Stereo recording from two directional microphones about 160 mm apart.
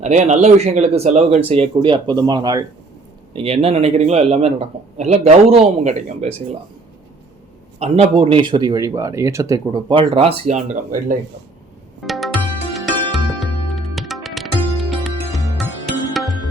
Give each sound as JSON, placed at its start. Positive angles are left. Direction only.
{"t": 0.0, "sound": "a man's voice", "side_deg": -45}
{"t": 3.3, "sound": "a man's voice", "side_deg": -35}
{"t": 7.8, "sound": "speech", "side_deg": -40}
{"t": 9.9, "sound": "speech", "side_deg": -35}
{"t": 12.0, "sound": "music", "side_deg": 0}